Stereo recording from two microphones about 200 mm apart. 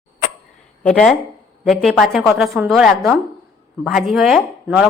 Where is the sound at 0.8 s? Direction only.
5° left (ahead or behind).